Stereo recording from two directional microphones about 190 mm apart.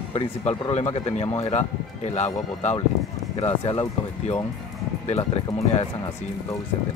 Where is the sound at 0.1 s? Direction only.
35° left (ahead or behind).